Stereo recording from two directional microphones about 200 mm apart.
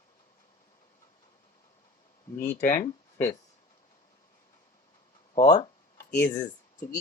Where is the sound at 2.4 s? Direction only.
35° left (ahead or behind).